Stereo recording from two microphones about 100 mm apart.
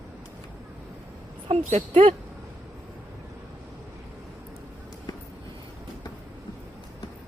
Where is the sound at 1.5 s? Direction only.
85° right.